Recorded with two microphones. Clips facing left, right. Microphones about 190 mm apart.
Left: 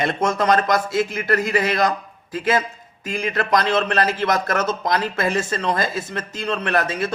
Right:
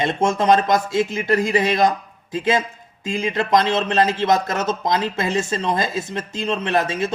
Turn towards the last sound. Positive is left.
turn(degrees=-25)  # may be behind; listen again after turning